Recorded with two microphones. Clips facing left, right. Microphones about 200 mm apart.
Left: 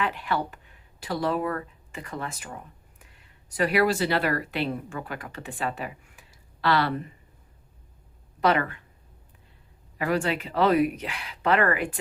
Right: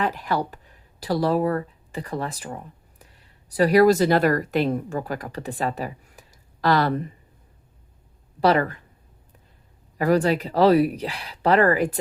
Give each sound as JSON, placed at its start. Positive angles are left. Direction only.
{"t": 0.0, "sound": "speech", "side_deg": -40}
{"t": 8.4, "sound": "speech", "side_deg": -35}
{"t": 10.0, "sound": "speech", "side_deg": -40}